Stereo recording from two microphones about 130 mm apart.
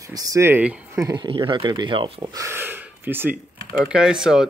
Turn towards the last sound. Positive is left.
turn(degrees=-5)  # may be behind; listen again after turning